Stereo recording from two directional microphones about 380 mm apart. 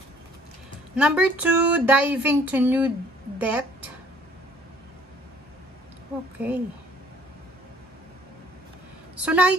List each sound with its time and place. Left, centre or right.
0.9 s a woman's voice: centre
6.4 s speech: centre
9.1 s a woman's voice: centre